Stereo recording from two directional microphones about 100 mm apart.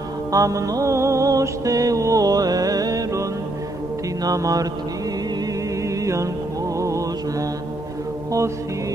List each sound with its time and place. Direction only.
0.3 s mantra: 35° right (ahead or behind)
5.9 s music: 30° right (ahead or behind)